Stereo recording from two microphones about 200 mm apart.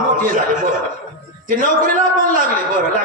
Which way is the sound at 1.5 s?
45° right (ahead or behind).